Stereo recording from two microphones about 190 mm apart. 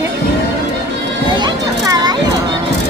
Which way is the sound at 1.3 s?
20° right (ahead or behind).